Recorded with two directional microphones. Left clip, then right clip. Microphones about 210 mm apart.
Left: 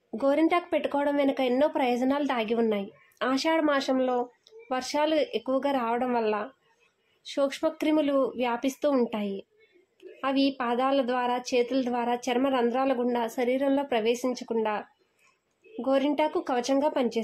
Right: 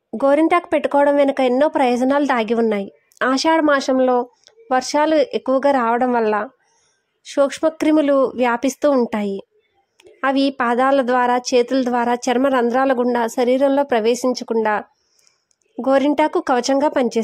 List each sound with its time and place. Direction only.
0.2 s a woman's voice: 30° right (ahead or behind)